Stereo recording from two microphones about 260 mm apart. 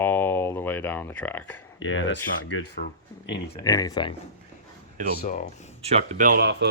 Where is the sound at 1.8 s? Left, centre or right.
Left.